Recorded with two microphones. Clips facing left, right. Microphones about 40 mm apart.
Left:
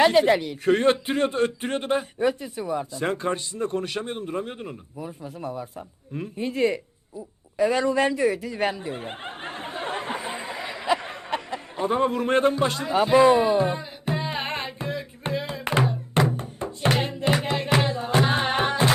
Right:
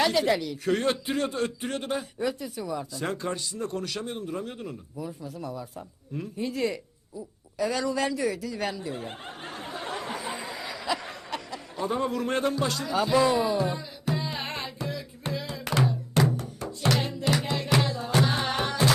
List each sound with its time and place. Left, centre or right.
0.0 s speech: left
7.6 s snicker: left